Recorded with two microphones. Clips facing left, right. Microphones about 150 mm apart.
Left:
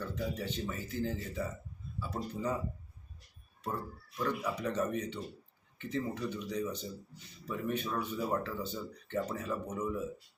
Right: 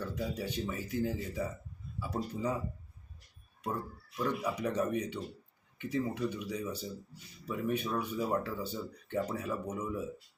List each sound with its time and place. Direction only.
0.1 s speech: 10° right (ahead or behind)
4.2 s speech: 10° right (ahead or behind)